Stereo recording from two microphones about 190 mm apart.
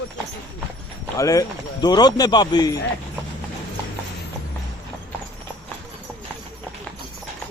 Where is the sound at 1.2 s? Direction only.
20° left (ahead or behind).